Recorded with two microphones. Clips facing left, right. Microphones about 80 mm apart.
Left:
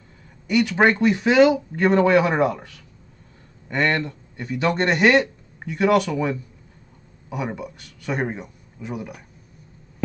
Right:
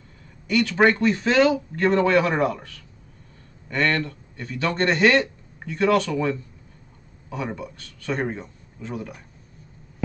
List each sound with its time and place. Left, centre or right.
0.5 s a man's voice: centre